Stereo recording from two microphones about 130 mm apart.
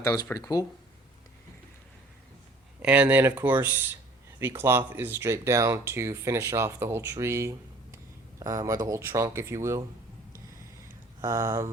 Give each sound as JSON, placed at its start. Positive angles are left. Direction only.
{"t": 0.0, "sound": "speech", "side_deg": 25}
{"t": 2.8, "sound": "speech", "side_deg": -10}
{"t": 11.2, "sound": "speech", "side_deg": -25}